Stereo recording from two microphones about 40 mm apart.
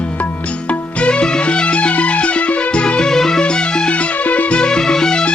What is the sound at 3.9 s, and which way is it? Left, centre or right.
Music, left.